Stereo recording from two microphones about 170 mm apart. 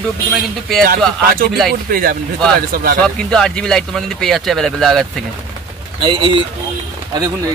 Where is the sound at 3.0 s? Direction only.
5° left (ahead or behind).